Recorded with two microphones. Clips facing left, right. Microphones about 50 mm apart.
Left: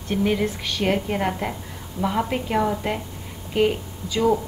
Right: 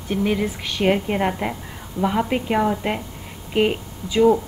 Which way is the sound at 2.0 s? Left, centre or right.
Right.